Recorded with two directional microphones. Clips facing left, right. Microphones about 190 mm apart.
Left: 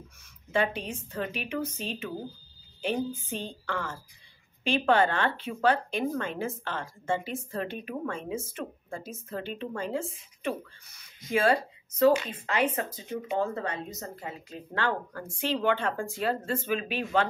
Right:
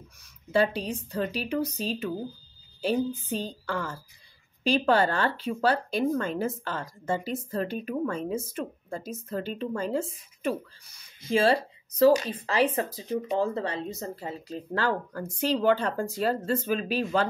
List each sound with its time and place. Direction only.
0.5 s a woman's voice: 35° right (ahead or behind)